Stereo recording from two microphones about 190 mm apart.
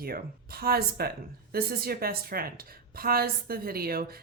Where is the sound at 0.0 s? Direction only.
50° right (ahead or behind).